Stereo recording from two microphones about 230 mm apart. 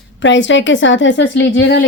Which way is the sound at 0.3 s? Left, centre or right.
Left.